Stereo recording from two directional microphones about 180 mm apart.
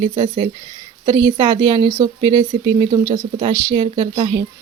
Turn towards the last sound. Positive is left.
turn(degrees=-20)  # may be behind; listen again after turning